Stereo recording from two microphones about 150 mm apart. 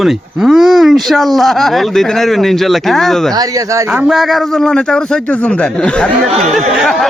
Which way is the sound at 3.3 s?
25° right (ahead or behind).